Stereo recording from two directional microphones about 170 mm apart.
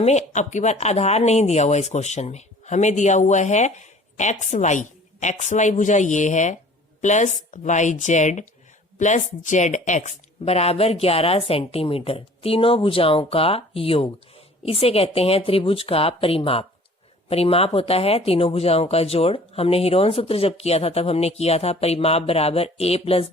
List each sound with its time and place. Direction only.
0.0 s speech: 40° left (ahead or behind)